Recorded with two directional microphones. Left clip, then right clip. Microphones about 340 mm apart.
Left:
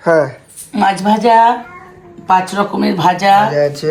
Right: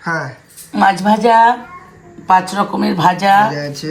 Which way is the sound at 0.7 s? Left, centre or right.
Right.